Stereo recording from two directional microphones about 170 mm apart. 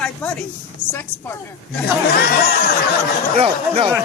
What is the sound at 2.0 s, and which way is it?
Speech, 65° left (ahead or behind).